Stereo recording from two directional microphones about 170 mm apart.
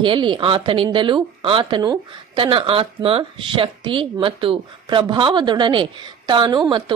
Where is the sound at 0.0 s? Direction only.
30° right (ahead or behind).